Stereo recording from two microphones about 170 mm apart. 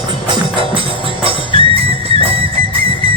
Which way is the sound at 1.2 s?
35° right (ahead or behind).